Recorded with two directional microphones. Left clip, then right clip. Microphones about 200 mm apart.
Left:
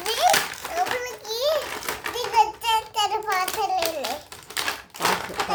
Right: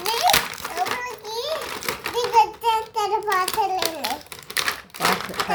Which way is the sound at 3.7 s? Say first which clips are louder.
Even; 25° right (ahead or behind).